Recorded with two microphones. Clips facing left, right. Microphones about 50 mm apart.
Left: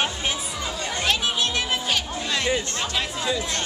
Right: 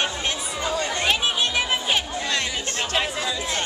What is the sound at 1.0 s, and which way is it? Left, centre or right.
Children playing, centre.